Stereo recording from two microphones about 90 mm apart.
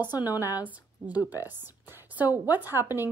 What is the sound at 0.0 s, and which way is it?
Speech, 20° right (ahead or behind).